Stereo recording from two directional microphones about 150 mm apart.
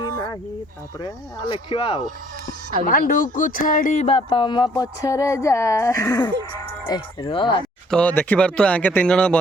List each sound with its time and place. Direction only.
0.0 s a sound: 25° left (ahead or behind)
1.0 s speech: 35° left (ahead or behind)
2.8 s speech: 65° left (ahead or behind)
4.0 s speech: 35° left (ahead or behind)
7.9 s speech: 10° left (ahead or behind)